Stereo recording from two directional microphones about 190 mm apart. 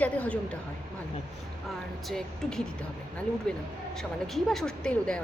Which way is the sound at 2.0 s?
5° left (ahead or behind).